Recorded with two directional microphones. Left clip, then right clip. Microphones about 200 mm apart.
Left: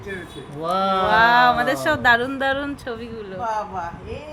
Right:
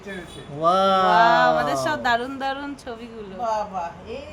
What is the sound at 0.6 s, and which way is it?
Speech, 60° right (ahead or behind).